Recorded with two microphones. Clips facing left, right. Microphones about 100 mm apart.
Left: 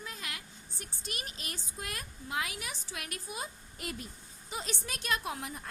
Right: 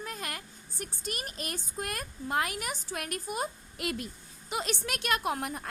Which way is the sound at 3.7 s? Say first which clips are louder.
Right 6 dB; 80° right.